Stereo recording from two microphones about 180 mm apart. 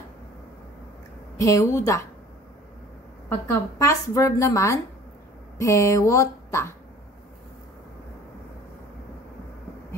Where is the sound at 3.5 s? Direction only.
15° left (ahead or behind).